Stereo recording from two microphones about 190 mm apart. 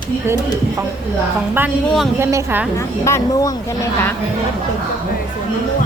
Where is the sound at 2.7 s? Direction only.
15° left (ahead or behind).